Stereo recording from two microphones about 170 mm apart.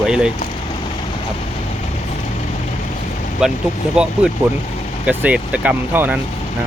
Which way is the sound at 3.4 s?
5° right (ahead or behind).